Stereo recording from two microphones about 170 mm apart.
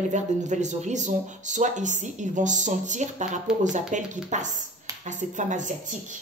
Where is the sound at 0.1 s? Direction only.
45° right (ahead or behind).